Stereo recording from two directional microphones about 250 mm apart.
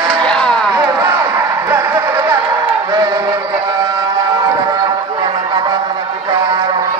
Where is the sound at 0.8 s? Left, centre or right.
Centre.